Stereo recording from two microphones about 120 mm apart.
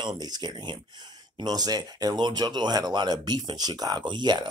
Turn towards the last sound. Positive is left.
turn(degrees=-40)  # may be behind; listen again after turning